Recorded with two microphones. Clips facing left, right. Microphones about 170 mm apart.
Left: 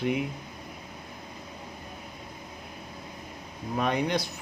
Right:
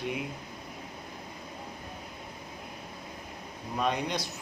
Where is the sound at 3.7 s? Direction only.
60° left (ahead or behind).